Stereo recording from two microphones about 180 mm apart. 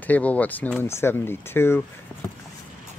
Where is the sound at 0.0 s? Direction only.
10° left (ahead or behind).